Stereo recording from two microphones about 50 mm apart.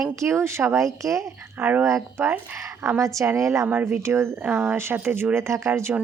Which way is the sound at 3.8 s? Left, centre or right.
Right.